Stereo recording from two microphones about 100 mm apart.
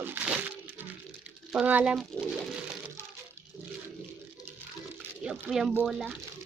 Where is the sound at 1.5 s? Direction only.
15° right (ahead or behind).